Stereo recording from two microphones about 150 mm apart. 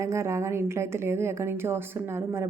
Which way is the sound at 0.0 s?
20° right (ahead or behind).